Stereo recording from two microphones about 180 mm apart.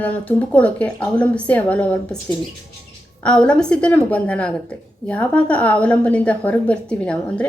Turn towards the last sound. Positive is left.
turn(degrees=5)  # may be behind; listen again after turning